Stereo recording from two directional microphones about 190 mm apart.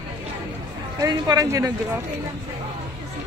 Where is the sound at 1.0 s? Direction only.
20° right (ahead or behind).